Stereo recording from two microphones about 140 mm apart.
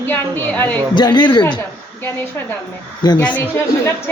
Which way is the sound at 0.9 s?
30° left (ahead or behind).